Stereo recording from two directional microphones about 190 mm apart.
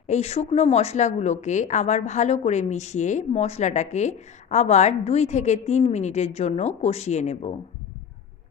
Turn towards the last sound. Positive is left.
turn(degrees=35)  # may be behind; listen again after turning